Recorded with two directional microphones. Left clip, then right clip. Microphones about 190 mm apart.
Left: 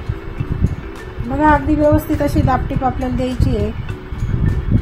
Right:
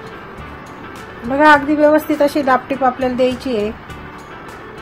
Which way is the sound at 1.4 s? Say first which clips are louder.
Right 3 dB; 20° right (ahead or behind).